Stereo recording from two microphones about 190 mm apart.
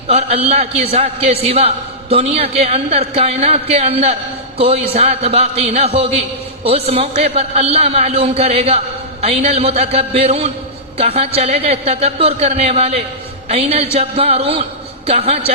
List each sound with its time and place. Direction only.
0.1 s a man's voice: 30° right (ahead or behind)